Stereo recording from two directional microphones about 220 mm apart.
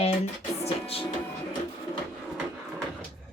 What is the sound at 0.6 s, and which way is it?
Speech, 25° left (ahead or behind).